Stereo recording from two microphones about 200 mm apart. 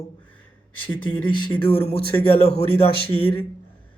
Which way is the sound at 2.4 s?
30° left (ahead or behind).